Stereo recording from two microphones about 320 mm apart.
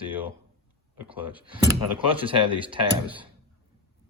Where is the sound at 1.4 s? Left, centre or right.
Centre.